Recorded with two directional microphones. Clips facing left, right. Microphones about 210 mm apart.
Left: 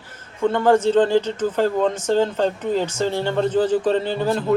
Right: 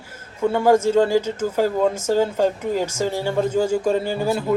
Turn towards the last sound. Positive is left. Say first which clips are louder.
# left 1 dB
turn(degrees=-10)  # may be behind; listen again after turning